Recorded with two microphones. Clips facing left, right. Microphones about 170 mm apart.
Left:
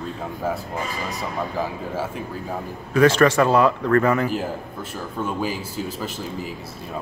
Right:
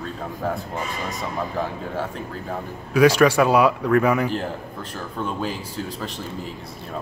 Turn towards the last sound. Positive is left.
turn(degrees=5)  # may be behind; listen again after turning